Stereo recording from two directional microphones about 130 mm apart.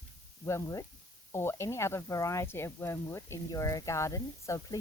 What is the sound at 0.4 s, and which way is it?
Speech, 25° left (ahead or behind).